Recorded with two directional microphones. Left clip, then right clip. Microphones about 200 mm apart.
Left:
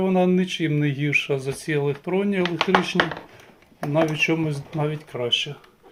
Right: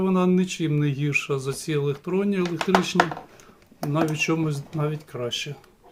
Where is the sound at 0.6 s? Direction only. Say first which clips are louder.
Left 2 dB; 30° right (ahead or behind).